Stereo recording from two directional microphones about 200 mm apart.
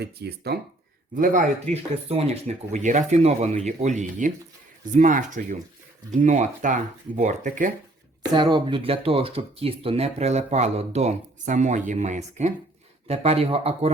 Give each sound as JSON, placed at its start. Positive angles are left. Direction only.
{"t": 0.0, "sound": "speech", "side_deg": -55}
{"t": 1.1, "sound": "speech", "side_deg": -40}
{"t": 8.2, "sound": "speech", "side_deg": -20}